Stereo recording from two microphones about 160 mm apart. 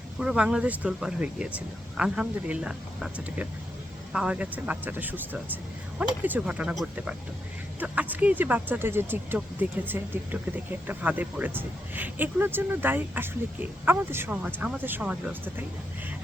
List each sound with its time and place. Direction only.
0.2 s speech: 5° right (ahead or behind)